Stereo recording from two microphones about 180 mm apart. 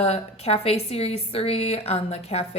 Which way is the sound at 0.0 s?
35° left (ahead or behind).